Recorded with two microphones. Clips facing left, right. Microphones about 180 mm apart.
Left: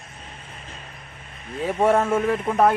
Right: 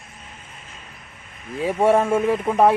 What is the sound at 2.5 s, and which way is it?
Speech, 5° right (ahead or behind).